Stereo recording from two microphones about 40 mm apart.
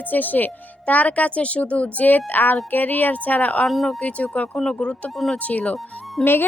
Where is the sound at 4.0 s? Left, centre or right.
Left.